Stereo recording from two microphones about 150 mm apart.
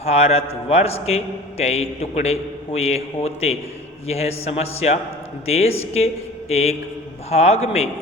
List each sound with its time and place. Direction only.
0.0 s a man's voice: 45° left (ahead or behind)